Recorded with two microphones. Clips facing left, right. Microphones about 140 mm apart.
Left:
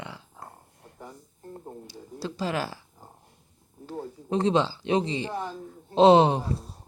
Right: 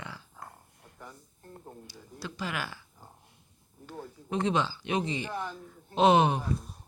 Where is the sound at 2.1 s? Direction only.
35° left (ahead or behind).